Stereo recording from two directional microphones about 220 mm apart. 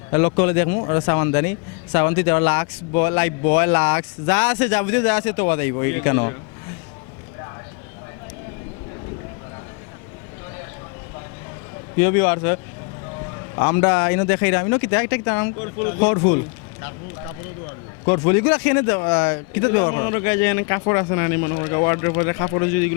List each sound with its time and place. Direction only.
0.1 s speech: 15° left (ahead or behind)
11.9 s speech: 15° left (ahead or behind)
13.6 s speech: 15° left (ahead or behind)
18.0 s speech: 15° left (ahead or behind)